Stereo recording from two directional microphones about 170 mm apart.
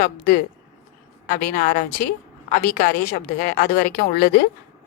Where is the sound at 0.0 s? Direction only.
60° left (ahead or behind).